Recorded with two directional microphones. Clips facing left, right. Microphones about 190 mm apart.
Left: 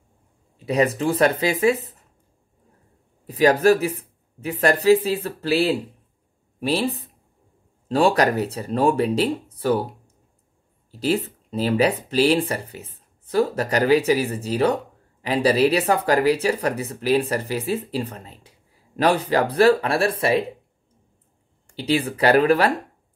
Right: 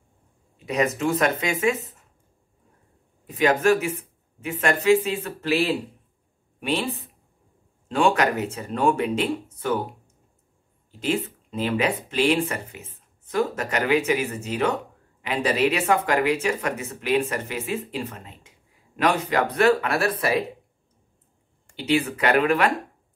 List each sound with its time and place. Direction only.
0.7 s speech: 35° left (ahead or behind)
3.3 s speech: 35° left (ahead or behind)
21.7 s speech: 35° left (ahead or behind)